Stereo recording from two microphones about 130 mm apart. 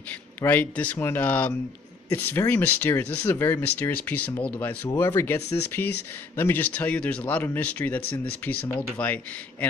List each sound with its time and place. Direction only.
0.1 s speech: 15° left (ahead or behind)